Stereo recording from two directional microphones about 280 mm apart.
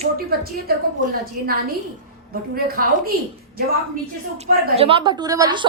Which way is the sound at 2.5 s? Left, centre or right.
Right.